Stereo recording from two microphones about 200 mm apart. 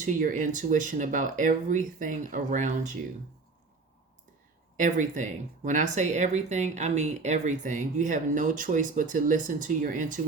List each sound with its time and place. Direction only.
0.0 s speech: 40° right (ahead or behind)
4.8 s speech: 40° right (ahead or behind)